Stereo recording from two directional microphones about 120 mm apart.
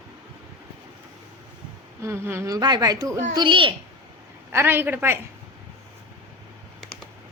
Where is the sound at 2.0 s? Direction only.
20° right (ahead or behind); by 3.7 s 45° right (ahead or behind).